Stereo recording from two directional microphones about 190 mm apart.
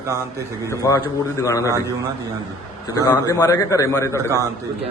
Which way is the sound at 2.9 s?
20° left (ahead or behind).